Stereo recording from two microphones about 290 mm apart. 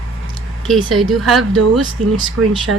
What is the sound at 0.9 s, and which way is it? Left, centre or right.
Speech, centre.